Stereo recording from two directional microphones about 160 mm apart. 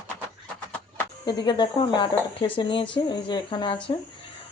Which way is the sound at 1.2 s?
25° left (ahead or behind).